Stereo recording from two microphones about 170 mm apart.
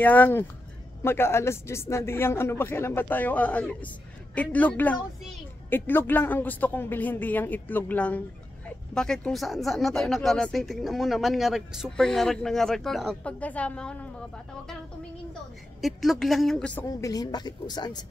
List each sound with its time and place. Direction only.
0.0 s speech: 10° left (ahead or behind)
15.8 s speech: centre (ahead or behind)
17.0 s speech: 20° left (ahead or behind)